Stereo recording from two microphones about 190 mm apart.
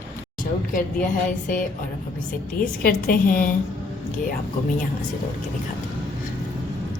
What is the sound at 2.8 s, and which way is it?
Speech, 50° left (ahead or behind).